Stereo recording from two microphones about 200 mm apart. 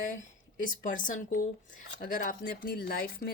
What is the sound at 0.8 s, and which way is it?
A woman's voice, 40° left (ahead or behind).